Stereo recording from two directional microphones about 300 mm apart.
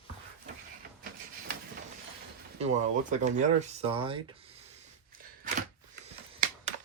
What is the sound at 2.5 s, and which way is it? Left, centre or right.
Speech, right.